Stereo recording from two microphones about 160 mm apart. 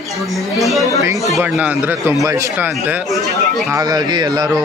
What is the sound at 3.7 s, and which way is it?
Speech, 25° right (ahead or behind).